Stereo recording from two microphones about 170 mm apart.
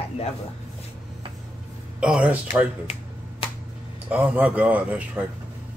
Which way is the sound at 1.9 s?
5° right (ahead or behind).